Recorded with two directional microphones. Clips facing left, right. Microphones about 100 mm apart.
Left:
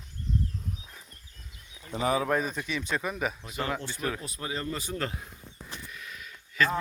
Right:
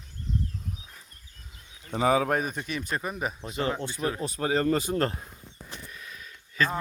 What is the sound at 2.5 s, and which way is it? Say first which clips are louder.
Speech: even; 45° right (ahead or behind).